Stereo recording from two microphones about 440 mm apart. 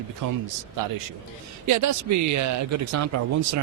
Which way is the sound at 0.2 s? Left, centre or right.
Right.